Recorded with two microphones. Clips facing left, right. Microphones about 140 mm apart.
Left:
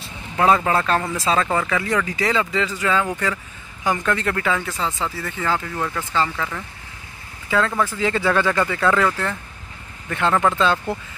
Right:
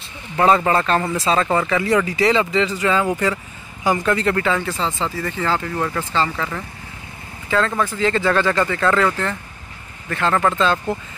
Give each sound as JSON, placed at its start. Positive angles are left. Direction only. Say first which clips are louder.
{"t": 0.6, "sound": "speech", "louder": "right 2 dB", "side_deg": 0}
{"t": 4.8, "sound": "speech", "louder": "right 2 dB", "side_deg": -20}
{"t": 5.2, "sound": "speech", "louder": "right 2 dB", "side_deg": 5}
{"t": 7.4, "sound": "speech", "louder": "right 1 dB", "side_deg": 5}